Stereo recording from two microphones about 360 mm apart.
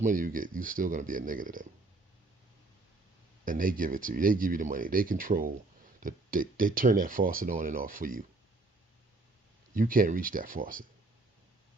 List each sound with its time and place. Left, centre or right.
0.0 s speech: right
3.4 s speech: right
9.7 s speech: right